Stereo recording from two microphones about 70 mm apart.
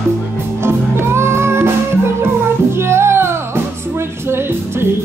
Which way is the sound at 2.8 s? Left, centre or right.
Right.